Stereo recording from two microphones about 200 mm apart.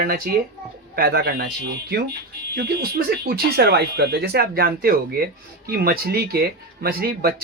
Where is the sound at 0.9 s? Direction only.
50° right (ahead or behind).